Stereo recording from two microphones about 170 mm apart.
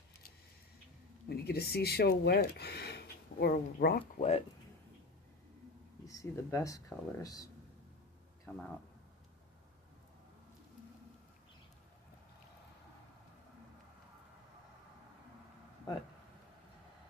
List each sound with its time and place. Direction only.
1.3 s speech: 70° left (ahead or behind)
4.2 s speech: 40° left (ahead or behind)
6.1 s speech: 20° left (ahead or behind)
8.5 s speech: 10° left (ahead or behind)